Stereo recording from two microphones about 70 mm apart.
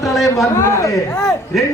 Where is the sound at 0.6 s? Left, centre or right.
Left.